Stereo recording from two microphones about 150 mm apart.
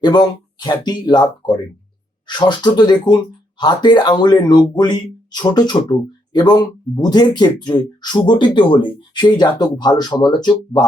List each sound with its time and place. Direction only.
0.0 s speech: 30° left (ahead or behind)